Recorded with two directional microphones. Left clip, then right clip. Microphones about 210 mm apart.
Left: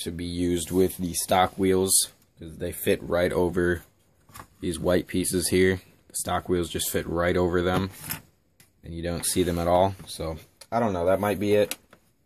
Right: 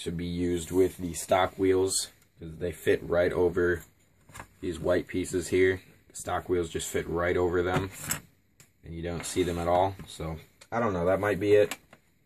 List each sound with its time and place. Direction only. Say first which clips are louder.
0.0 s speech: left 3 dB; 45° left (ahead or behind)
8.9 s speech: left 3 dB; 45° left (ahead or behind)